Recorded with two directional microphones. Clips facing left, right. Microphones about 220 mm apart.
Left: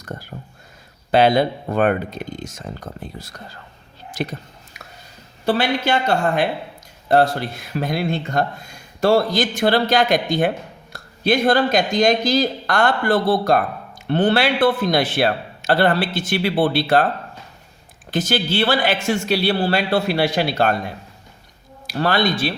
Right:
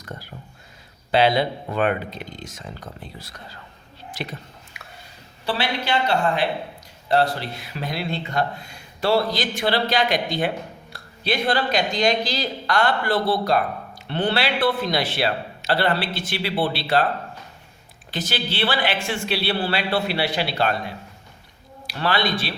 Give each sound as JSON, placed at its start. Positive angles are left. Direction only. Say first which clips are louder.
{"t": 0.0, "sound": "whispering", "louder": "left 4 dB", "side_deg": 45}
{"t": 1.1, "sound": "speech", "louder": "left 4 dB", "side_deg": 50}
{"t": 4.1, "sound": "whispering", "louder": "left 6 dB", "side_deg": 45}
{"t": 5.5, "sound": "speech", "louder": "left 6 dB", "side_deg": 45}
{"t": 18.1, "sound": "speech", "louder": "left 7 dB", "side_deg": 45}